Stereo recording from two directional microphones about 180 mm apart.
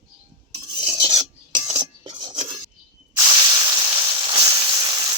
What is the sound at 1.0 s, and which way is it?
Filing, 25° right (ahead or behind).